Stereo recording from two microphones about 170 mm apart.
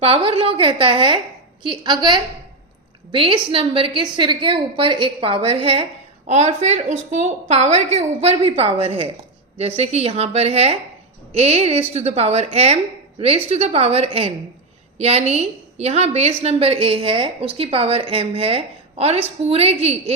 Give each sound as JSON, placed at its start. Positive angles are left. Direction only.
{"t": 0.0, "sound": "a woman's voice", "side_deg": -35}